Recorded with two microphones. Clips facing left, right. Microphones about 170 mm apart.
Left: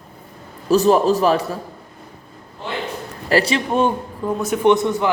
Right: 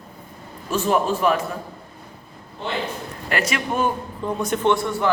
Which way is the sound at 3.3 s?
30° left (ahead or behind).